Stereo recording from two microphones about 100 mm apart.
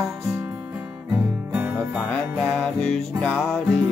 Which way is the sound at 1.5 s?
20° right (ahead or behind).